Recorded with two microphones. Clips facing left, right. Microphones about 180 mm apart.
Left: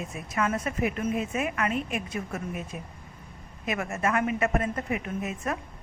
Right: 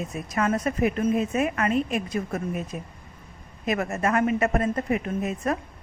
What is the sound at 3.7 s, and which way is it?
A woman's voice, 40° right (ahead or behind).